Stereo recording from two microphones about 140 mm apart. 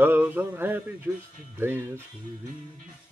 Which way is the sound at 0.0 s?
15° right (ahead or behind).